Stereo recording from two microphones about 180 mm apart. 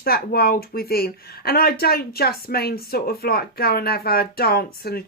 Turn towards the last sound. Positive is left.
turn(degrees=60)  # may be behind; listen again after turning